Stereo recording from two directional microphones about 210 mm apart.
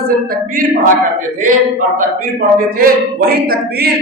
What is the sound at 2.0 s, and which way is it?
A man's voice, 40° right (ahead or behind).